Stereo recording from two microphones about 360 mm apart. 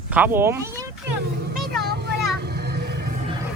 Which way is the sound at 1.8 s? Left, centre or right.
Right.